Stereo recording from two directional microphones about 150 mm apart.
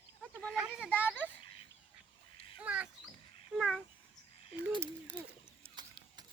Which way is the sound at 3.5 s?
Centre (ahead or behind).